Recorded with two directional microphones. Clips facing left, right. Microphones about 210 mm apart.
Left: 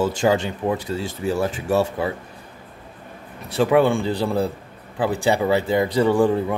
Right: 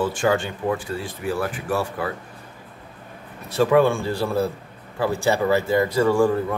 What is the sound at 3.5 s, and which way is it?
Speech, 15° left (ahead or behind).